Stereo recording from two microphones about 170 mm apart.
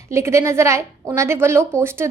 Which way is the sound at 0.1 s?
15° right (ahead or behind).